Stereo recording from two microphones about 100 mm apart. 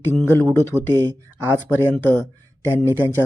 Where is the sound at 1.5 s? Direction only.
20° right (ahead or behind).